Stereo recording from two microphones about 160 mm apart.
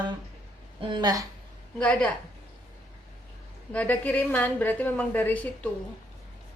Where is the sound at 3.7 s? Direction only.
10° left (ahead or behind).